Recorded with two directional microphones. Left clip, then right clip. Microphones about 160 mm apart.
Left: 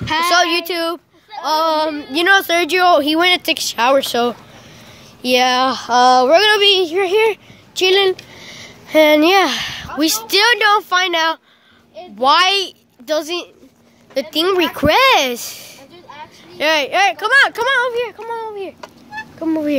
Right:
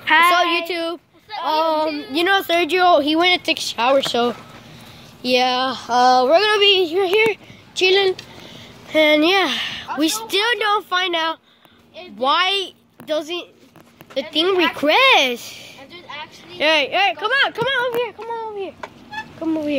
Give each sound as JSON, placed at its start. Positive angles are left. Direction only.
{"t": 0.0, "sound": "a sound", "side_deg": 35}
{"t": 0.3, "sound": "a woman's voice", "side_deg": 15}
{"t": 5.2, "sound": "speech", "side_deg": 15}
{"t": 5.6, "sound": "speech", "side_deg": 30}
{"t": 5.9, "sound": "speech", "side_deg": 10}
{"t": 8.5, "sound": "a child's voice", "side_deg": 25}
{"t": 19.4, "sound": "speech", "side_deg": 25}